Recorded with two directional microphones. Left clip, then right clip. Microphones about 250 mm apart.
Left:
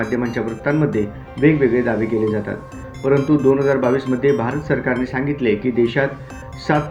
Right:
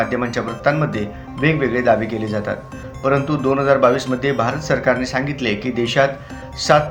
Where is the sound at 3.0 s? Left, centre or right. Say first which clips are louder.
Left 2 dB; centre.